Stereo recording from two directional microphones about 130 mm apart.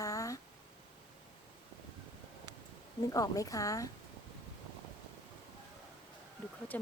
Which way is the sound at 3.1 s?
30° left (ahead or behind).